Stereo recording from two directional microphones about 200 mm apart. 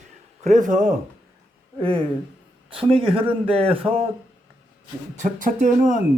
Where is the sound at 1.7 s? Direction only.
25° right (ahead or behind).